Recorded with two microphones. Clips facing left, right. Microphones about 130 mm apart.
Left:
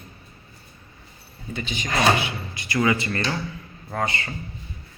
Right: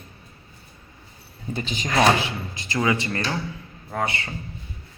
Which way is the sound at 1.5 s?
40° right (ahead or behind).